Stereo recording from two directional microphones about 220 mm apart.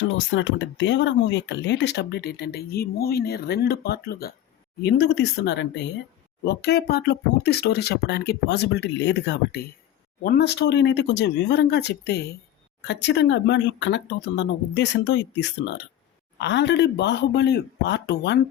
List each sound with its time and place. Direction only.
0.3 s speech: 55° left (ahead or behind)